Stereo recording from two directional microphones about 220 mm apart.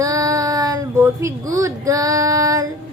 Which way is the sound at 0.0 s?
15° right (ahead or behind).